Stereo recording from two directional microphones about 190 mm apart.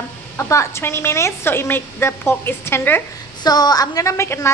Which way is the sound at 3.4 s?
20° left (ahead or behind).